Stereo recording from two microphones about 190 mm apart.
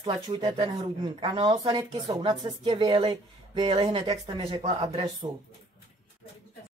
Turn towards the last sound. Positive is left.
turn(degrees=-30)  # may be behind; listen again after turning